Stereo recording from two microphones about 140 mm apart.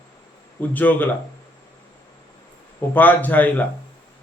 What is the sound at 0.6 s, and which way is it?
Speech, 10° left (ahead or behind).